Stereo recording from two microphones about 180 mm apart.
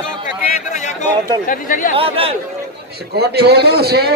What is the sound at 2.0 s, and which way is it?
Speech, 30° right (ahead or behind).